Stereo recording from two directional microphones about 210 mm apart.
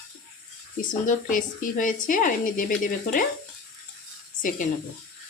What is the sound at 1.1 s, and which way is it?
Speech, 40° left (ahead or behind).